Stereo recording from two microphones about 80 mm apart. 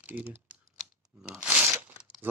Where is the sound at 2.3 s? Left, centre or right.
Right.